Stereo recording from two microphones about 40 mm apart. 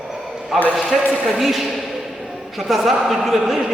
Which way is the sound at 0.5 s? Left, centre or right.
Centre.